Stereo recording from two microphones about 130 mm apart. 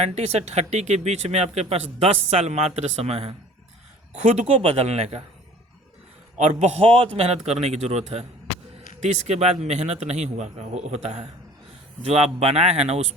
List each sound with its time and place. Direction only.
0.0 s speech: 55° right (ahead or behind)
4.1 s speech: 60° right (ahead or behind)
6.4 s a man's voice: 55° right (ahead or behind)